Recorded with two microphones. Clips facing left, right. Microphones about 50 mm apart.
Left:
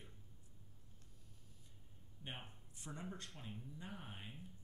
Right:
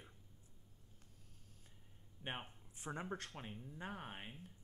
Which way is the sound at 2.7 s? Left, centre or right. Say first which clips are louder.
Right 5 dB; right.